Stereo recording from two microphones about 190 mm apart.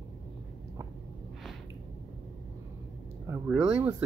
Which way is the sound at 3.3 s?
15° right (ahead or behind).